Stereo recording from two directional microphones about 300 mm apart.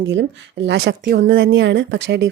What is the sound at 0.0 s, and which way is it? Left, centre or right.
Speech, right.